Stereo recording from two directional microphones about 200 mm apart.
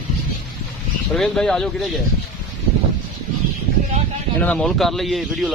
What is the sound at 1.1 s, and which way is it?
Speech, centre (ahead or behind).